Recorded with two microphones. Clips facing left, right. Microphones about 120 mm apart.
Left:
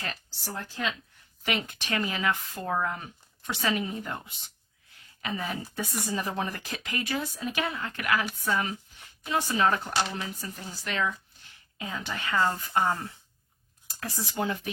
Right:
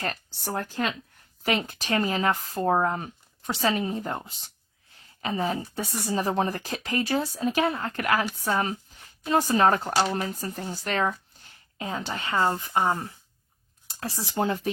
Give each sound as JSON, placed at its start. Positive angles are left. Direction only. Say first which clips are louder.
{"t": 0.0, "sound": "speech", "louder": "right 6 dB", "side_deg": -50}
{"t": 1.5, "sound": "a woman's voice", "louder": "right 5 dB", "side_deg": -35}